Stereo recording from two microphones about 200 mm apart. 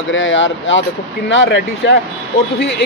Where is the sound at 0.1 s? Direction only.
70° left (ahead or behind).